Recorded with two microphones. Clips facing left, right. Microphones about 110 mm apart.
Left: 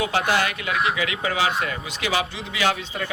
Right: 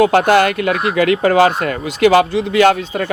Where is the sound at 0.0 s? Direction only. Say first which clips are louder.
Right 11 dB; 55° right (ahead or behind).